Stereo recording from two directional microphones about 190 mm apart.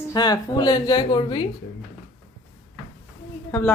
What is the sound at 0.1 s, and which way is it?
Speech, 20° left (ahead or behind).